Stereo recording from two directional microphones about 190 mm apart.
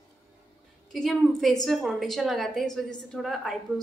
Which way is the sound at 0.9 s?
Centre (ahead or behind).